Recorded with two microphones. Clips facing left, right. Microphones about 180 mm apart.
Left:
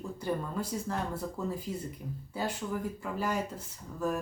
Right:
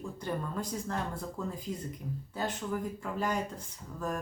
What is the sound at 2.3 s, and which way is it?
Speech, 10° left (ahead or behind).